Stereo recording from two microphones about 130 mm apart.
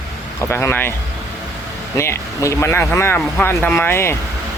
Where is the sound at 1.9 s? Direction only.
25° left (ahead or behind).